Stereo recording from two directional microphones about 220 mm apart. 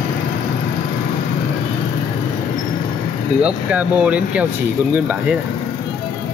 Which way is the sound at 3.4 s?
5° right (ahead or behind).